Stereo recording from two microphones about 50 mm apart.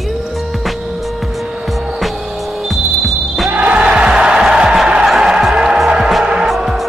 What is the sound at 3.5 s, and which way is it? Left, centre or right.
Music, right.